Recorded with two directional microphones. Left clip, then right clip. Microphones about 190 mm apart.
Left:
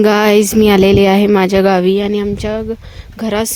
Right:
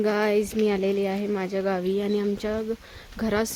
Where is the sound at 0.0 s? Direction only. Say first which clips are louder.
Left 13 dB; 65° left (ahead or behind).